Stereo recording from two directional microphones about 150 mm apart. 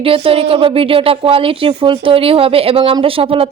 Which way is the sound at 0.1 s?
40° right (ahead or behind).